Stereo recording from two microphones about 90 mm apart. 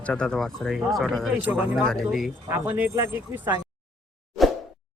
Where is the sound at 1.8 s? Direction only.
5° left (ahead or behind).